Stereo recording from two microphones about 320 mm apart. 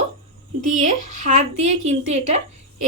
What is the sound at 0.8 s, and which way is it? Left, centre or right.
A woman's voice, right.